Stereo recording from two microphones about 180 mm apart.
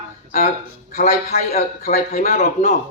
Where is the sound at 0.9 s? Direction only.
40° left (ahead or behind).